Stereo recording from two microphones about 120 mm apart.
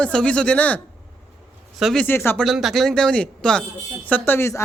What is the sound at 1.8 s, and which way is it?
Speech, 5° left (ahead or behind).